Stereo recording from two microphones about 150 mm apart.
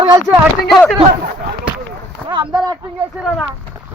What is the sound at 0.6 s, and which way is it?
Speech, centre (ahead or behind).